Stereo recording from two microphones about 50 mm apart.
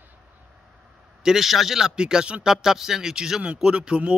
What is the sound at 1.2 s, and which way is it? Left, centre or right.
Speech, centre.